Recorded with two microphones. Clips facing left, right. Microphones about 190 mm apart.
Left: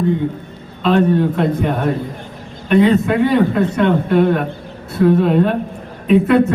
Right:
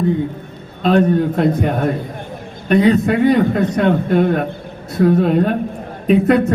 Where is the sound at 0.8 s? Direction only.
40° right (ahead or behind).